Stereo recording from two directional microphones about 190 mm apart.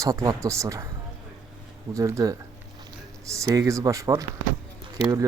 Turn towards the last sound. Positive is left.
turn(degrees=-20)  # may be behind; listen again after turning